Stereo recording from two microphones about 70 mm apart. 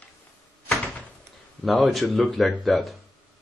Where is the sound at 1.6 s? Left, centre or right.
Centre.